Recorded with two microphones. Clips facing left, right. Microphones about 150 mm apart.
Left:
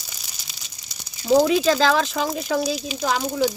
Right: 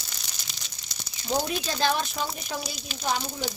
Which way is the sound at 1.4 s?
90° left.